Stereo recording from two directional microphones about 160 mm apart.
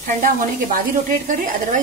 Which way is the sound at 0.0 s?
60° right (ahead or behind).